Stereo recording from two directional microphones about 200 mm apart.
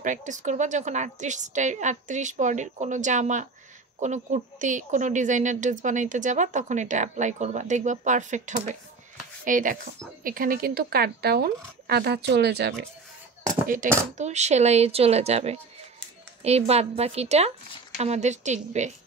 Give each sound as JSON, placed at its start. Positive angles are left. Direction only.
{"t": 0.0, "sound": "a woman's voice", "side_deg": -40}
{"t": 14.1, "sound": "a woman's voice", "side_deg": -35}